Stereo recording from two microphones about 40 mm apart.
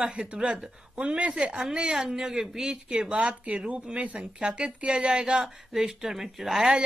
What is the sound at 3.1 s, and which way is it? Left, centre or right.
Speech, right.